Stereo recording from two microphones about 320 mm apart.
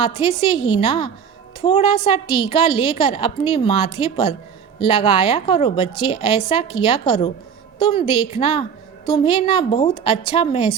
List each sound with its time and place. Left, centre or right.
0.2 s a woman's voice: centre